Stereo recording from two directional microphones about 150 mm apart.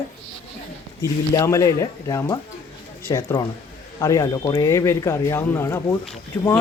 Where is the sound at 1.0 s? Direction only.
20° left (ahead or behind).